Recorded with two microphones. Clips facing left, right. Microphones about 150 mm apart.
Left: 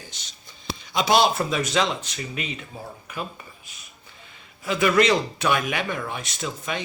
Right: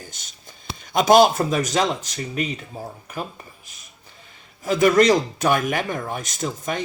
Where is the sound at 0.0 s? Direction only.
50° right (ahead or behind).